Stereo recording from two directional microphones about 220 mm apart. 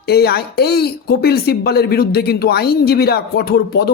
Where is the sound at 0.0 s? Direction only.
45° left (ahead or behind).